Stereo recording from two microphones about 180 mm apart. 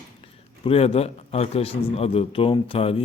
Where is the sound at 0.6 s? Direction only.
35° left (ahead or behind).